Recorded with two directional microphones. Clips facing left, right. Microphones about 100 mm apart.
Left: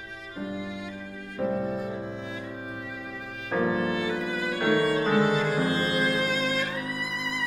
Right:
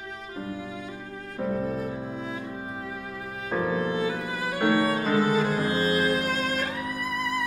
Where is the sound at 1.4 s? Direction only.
Centre (ahead or behind).